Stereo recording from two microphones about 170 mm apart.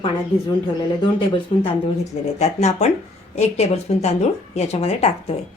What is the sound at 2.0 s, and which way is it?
Speech, 40° left (ahead or behind).